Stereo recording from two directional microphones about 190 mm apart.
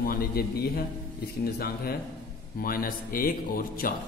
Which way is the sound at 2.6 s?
50° left (ahead or behind).